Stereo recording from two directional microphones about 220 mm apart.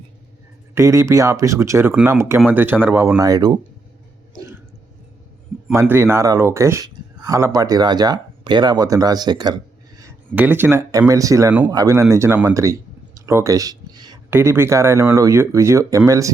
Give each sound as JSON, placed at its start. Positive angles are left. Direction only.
{"t": 0.7, "sound": "speech", "side_deg": -10}
{"t": 5.9, "sound": "speech", "side_deg": -10}
{"t": 10.3, "sound": "speech", "side_deg": -10}